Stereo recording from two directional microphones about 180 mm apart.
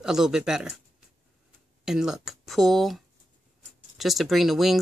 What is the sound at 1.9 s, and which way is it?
Speech, 5° right (ahead or behind).